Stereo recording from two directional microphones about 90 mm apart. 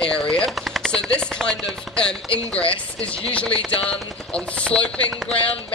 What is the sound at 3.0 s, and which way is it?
Chopping, 90° left.